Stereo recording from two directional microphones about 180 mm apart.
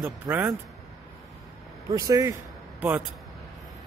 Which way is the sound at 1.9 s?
20° right (ahead or behind).